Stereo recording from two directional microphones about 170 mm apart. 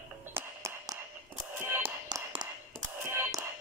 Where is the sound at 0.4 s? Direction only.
20° right (ahead or behind).